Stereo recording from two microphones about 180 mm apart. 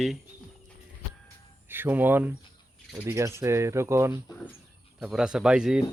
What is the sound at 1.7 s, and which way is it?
Speech, 10° right (ahead or behind).